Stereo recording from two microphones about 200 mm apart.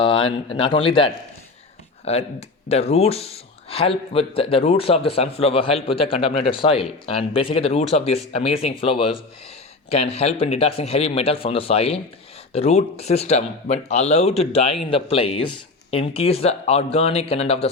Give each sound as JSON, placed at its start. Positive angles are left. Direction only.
{"t": 0.0, "sound": "speech", "side_deg": 25}